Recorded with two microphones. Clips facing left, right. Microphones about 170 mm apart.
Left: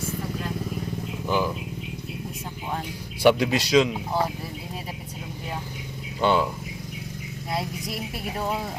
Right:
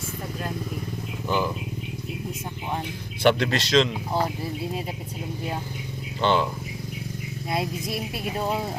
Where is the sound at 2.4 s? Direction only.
15° right (ahead or behind).